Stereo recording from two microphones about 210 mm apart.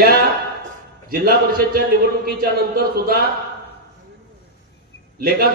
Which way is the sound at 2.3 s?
45° right (ahead or behind).